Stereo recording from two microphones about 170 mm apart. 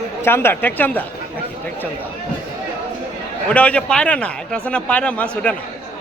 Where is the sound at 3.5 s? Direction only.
10° left (ahead or behind).